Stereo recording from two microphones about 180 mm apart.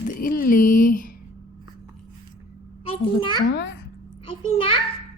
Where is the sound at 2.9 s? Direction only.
25° left (ahead or behind).